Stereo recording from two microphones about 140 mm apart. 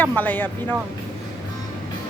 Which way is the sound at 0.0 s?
10° left (ahead or behind).